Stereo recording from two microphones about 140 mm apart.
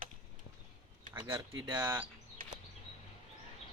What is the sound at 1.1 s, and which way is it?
Speech, 15° right (ahead or behind).